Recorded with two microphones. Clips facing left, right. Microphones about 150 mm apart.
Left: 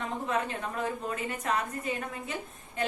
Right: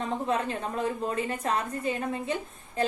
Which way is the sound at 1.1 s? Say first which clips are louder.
Right 3 dB; 30° right (ahead or behind).